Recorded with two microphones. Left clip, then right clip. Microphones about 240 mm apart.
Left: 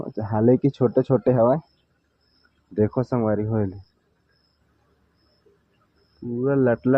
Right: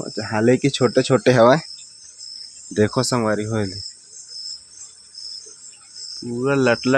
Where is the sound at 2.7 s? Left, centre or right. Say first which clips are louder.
Right 4 dB; right.